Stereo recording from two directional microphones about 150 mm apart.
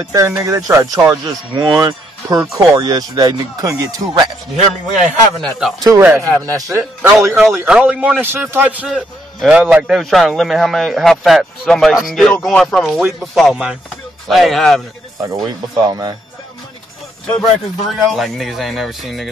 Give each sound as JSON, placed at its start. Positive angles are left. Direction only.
{"t": 0.1, "sound": "speech", "side_deg": -20}
{"t": 4.6, "sound": "a man's voice", "side_deg": -50}
{"t": 5.4, "sound": "speech", "side_deg": 0}
{"t": 5.8, "sound": "speech", "side_deg": -25}
{"t": 6.0, "sound": "a man's voice", "side_deg": -10}
{"t": 6.4, "sound": "speech", "side_deg": -25}
{"t": 6.8, "sound": "a man's voice", "side_deg": -5}
{"t": 8.8, "sound": "speech", "side_deg": 0}
{"t": 15.3, "sound": "speech", "side_deg": -25}
{"t": 17.9, "sound": "speech", "side_deg": 0}